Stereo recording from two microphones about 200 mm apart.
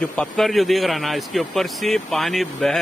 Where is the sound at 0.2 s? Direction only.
Centre (ahead or behind).